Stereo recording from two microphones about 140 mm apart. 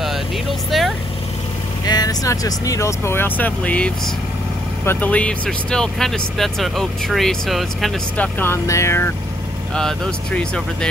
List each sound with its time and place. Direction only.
0.7 s vehicle: centre (ahead or behind)
1.9 s speech: 25° left (ahead or behind); by 7.9 s centre (ahead or behind)
8.2 s speech: 15° left (ahead or behind)
9.8 s speech: 5° left (ahead or behind)